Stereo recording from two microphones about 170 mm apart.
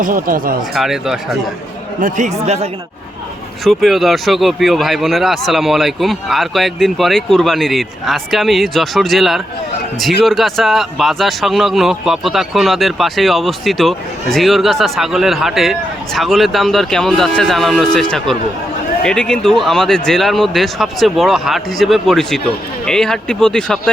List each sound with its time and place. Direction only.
0.0 s speech: 55° right (ahead or behind)
0.8 s a man's voice: centre (ahead or behind)
2.0 s speech: 50° right (ahead or behind)
3.6 s a man's voice: centre (ahead or behind)
19.0 s a man's voice: 5° left (ahead or behind)